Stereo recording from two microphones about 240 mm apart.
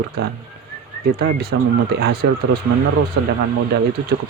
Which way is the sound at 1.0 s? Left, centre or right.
Right.